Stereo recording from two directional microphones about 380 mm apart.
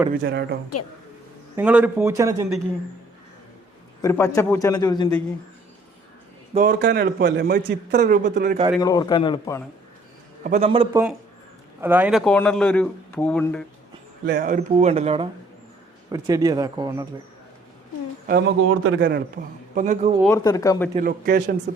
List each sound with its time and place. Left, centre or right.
0.1 s a man's voice: right
1.5 s speech: centre
4.0 s a man's voice: centre
6.5 s a man's voice: right
8.7 s a man's voice: centre
10.4 s speech: centre
14.3 s speech: right
18.3 s a man's voice: right
20.2 s a man's voice: centre
20.9 s a man's voice: right